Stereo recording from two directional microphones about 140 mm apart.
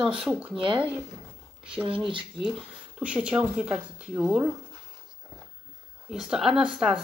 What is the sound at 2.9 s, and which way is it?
Speech, 5° right (ahead or behind).